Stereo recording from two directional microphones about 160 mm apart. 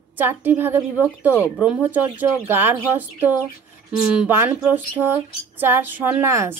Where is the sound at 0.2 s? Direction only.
10° right (ahead or behind).